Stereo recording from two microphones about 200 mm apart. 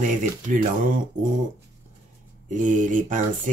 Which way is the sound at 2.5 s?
40° right (ahead or behind).